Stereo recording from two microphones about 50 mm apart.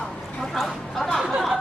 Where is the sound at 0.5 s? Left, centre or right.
Centre.